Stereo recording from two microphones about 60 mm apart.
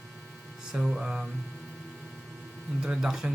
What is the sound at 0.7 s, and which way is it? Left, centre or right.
Speech, centre.